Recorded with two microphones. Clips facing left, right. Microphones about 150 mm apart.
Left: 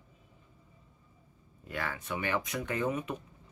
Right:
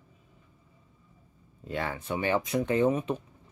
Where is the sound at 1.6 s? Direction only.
30° right (ahead or behind).